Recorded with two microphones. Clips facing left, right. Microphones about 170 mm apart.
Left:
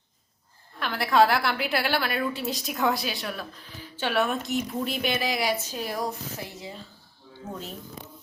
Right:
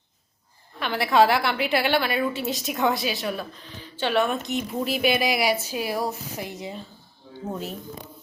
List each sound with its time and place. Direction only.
0.8 s a woman's voice: centre (ahead or behind)
6.4 s speech: 20° right (ahead or behind)